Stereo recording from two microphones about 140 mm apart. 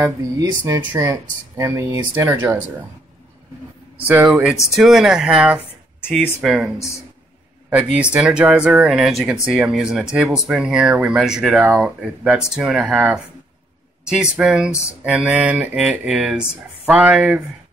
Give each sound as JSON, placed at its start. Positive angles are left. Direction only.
{"t": 0.4, "sound": "speech", "side_deg": -25}
{"t": 4.3, "sound": "speech", "side_deg": -5}
{"t": 7.7, "sound": "speech", "side_deg": -10}